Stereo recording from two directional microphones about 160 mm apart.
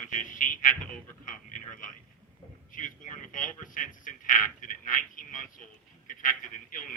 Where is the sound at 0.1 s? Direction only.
55° left (ahead or behind).